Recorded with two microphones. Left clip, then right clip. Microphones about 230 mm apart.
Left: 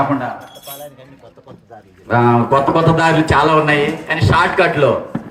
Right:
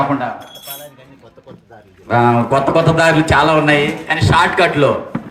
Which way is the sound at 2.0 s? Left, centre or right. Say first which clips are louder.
Even; right.